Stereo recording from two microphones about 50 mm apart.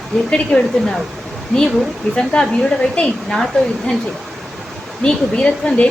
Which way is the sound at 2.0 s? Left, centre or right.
Centre.